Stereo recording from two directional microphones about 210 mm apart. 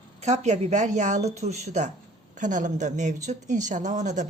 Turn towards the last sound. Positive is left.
turn(degrees=-35)  # may be behind; listen again after turning